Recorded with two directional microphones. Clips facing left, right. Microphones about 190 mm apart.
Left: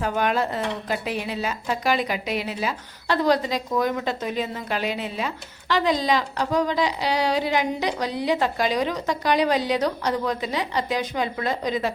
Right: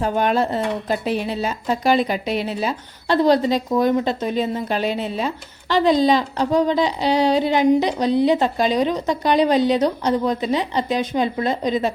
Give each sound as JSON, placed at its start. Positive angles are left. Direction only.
{"t": 0.0, "sound": "speech", "side_deg": -30}